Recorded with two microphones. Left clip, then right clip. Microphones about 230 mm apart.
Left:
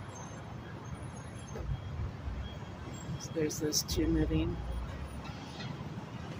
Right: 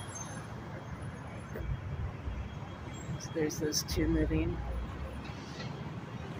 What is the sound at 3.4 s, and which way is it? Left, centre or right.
Speech, centre.